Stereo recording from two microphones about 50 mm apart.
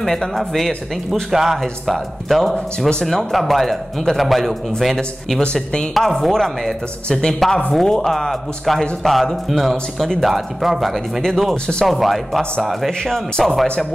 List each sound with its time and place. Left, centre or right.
0.0 s speech: centre
1.3 s a man's voice: centre
5.4 s speech: centre
5.9 s a man's voice: centre